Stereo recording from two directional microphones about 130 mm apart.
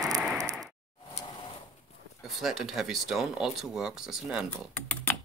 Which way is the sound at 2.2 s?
Centre (ahead or behind).